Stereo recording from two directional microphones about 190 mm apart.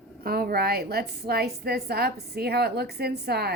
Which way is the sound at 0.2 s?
50° right (ahead or behind).